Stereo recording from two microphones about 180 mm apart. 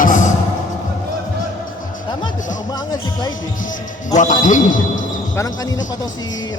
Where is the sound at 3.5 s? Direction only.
45° left (ahead or behind).